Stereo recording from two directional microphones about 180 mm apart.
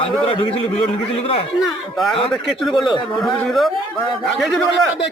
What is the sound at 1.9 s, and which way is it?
A man's voice, centre (ahead or behind).